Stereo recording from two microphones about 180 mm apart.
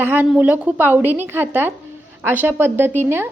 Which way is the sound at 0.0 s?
10° right (ahead or behind).